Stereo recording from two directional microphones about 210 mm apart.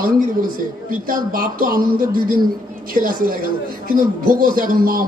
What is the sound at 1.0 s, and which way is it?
Speech, 40° right (ahead or behind).